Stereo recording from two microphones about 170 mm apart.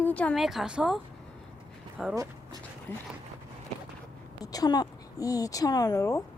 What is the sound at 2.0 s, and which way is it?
Speech, 5° right (ahead or behind).